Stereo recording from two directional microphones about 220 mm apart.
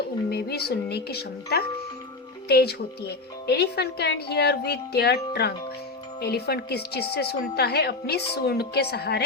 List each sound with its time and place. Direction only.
0.3 s speech: 45° left (ahead or behind)